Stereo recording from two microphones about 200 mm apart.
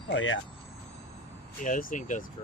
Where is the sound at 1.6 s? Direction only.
40° left (ahead or behind).